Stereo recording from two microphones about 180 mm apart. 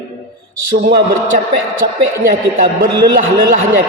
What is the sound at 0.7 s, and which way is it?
A woman's voice, 55° right (ahead or behind).